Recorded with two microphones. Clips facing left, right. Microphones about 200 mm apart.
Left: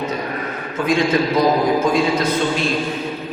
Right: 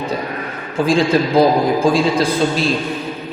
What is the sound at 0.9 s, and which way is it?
A man's voice, 30° right (ahead or behind).